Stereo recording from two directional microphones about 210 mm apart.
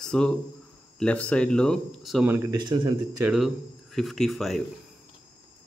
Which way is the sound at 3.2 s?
5° right (ahead or behind).